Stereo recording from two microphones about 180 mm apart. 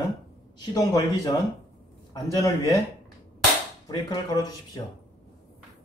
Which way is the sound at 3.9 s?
20° left (ahead or behind).